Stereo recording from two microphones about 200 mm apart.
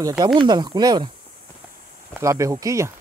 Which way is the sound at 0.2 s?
20° right (ahead or behind).